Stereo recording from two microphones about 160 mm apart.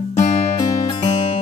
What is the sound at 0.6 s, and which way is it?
Music, 25° left (ahead or behind).